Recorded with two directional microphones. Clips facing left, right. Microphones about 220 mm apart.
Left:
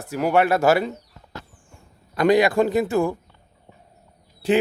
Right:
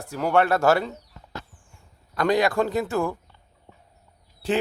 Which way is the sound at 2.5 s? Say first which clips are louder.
Left 4 dB; 15° left (ahead or behind).